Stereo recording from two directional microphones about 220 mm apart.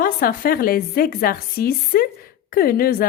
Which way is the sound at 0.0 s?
40° left (ahead or behind).